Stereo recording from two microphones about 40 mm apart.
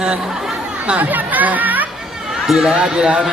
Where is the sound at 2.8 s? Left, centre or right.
Right.